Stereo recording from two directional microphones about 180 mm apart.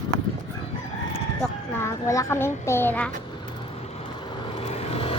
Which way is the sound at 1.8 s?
15° left (ahead or behind).